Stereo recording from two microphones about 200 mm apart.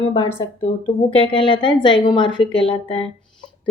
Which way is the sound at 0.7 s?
30° left (ahead or behind).